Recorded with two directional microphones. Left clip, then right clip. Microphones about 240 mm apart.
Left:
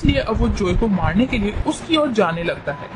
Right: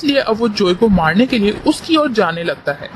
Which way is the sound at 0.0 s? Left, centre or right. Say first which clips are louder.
Right 5 dB; right.